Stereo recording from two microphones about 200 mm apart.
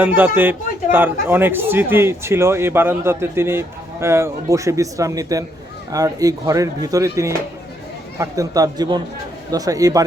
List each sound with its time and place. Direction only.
0.2 s speech: 10° right (ahead or behind)